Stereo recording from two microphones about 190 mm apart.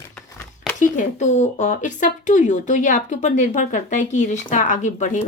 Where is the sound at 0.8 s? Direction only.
40° left (ahead or behind).